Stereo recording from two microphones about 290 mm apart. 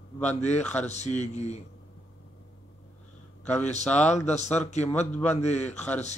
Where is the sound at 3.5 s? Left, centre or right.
Left.